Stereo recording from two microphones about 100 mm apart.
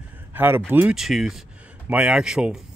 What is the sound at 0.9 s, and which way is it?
Speech, 5° right (ahead or behind).